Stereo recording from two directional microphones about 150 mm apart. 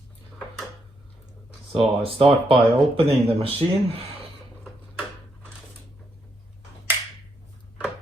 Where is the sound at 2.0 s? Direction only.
40° right (ahead or behind).